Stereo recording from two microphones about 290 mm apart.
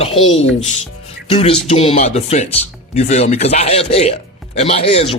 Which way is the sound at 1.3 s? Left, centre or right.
Centre.